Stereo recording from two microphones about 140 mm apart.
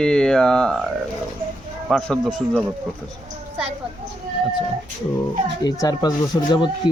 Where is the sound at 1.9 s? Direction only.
Centre (ahead or behind).